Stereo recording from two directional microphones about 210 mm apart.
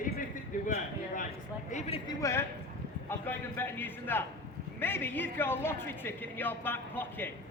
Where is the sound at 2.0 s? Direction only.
15° left (ahead or behind).